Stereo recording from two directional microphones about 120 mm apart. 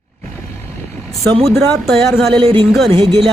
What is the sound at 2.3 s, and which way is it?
Speech, 45° right (ahead or behind).